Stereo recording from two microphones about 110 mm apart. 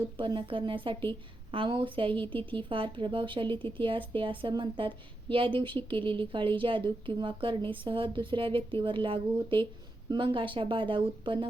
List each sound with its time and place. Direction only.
0.2 s a woman's voice: 50° right (ahead or behind)